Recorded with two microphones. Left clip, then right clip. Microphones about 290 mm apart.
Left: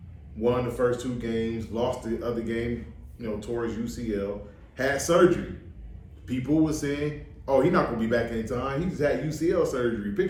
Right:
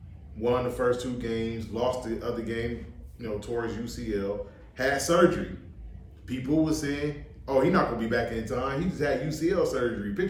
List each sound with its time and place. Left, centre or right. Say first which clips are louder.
0.4 s a man's voice: left 1 dB; centre